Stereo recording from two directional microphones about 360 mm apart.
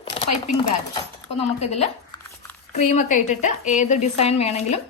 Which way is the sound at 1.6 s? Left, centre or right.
Centre.